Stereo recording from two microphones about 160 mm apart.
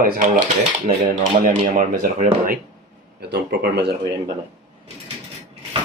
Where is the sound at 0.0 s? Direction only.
50° right (ahead or behind).